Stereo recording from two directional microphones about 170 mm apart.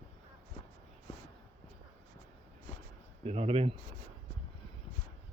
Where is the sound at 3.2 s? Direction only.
35° right (ahead or behind).